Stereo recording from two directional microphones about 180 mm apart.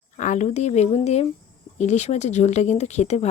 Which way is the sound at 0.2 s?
40° left (ahead or behind).